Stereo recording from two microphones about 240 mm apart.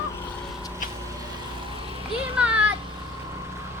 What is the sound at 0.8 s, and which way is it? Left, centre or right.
Vehicle, left.